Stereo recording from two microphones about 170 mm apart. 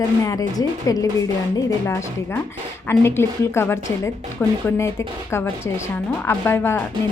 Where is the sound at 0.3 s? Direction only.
20° left (ahead or behind).